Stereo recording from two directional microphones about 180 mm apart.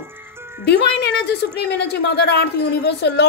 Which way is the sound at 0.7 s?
65° left (ahead or behind).